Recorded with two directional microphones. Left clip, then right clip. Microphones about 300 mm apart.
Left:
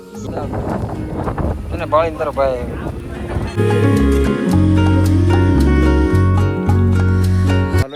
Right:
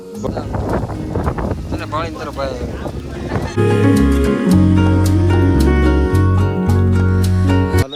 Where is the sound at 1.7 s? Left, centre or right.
Centre.